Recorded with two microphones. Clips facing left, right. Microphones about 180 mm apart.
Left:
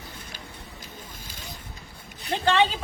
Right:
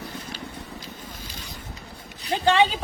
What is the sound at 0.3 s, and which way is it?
Vehicle, 50° left (ahead or behind).